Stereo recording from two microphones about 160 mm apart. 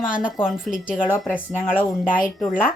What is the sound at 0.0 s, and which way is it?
Speech, 55° left (ahead or behind).